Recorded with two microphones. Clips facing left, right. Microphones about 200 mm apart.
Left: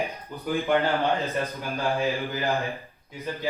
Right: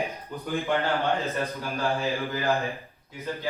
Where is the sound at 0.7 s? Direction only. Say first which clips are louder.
Left 2 dB; 15° left (ahead or behind).